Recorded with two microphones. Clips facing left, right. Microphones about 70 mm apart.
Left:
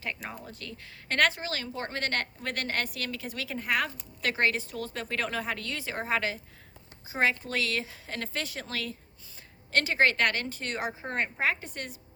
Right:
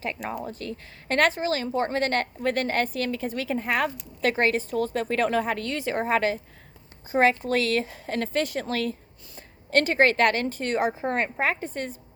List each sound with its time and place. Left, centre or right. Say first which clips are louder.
0.6 s a woman's voice: right 8 dB; right